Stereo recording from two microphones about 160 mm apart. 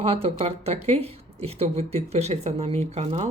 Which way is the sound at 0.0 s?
35° right (ahead or behind).